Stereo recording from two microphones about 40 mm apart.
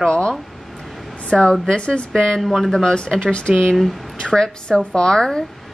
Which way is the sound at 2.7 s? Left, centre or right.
Centre.